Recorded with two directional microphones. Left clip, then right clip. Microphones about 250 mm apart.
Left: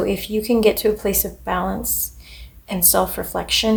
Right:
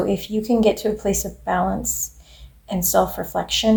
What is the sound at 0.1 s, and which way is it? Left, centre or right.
Speech, left.